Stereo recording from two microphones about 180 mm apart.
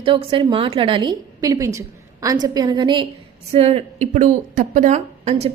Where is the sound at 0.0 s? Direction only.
30° right (ahead or behind).